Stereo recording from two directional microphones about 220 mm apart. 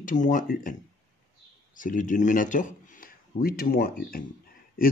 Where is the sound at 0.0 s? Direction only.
35° left (ahead or behind).